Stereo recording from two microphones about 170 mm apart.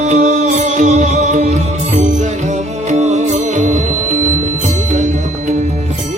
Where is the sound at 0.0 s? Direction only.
45° right (ahead or behind).